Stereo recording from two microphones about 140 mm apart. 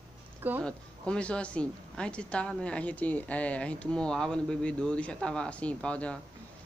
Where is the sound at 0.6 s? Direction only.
5° left (ahead or behind).